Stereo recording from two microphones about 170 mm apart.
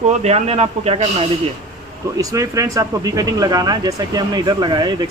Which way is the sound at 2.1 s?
20° right (ahead or behind).